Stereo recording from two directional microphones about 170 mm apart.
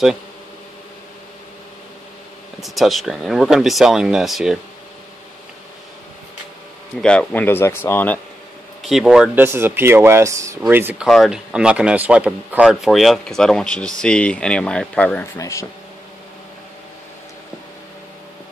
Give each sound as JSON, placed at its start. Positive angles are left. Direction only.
{"t": 2.6, "sound": "a man's voice", "side_deg": 0}
{"t": 7.0, "sound": "a man's voice", "side_deg": 5}
{"t": 8.8, "sound": "a man's voice", "side_deg": -5}